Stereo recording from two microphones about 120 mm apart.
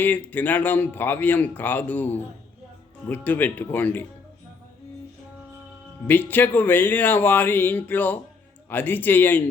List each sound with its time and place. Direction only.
0.0 s speech: 15° left (ahead or behind)
6.1 s speech: 15° left (ahead or behind)